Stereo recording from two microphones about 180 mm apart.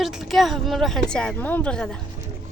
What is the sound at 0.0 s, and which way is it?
A woman's voice, centre (ahead or behind).